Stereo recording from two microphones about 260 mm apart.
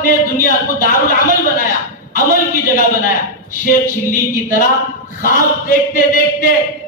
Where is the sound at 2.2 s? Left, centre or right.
Left.